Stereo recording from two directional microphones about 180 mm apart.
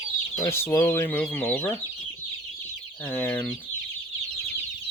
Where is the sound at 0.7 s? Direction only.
15° left (ahead or behind).